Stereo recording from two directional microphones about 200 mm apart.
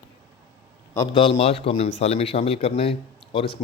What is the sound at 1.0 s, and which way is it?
Speech, 25° left (ahead or behind).